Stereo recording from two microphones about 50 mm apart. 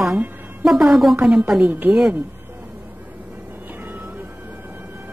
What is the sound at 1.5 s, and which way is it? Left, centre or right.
Speech, right.